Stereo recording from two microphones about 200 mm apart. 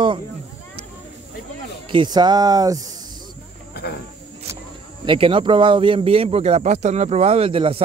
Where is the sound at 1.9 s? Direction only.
20° right (ahead or behind).